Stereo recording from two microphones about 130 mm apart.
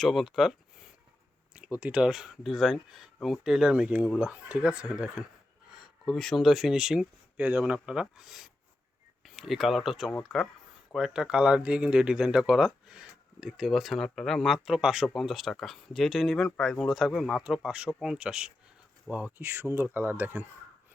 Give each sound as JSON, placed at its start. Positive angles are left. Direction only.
{"t": 0.0, "sound": "speech", "side_deg": 0}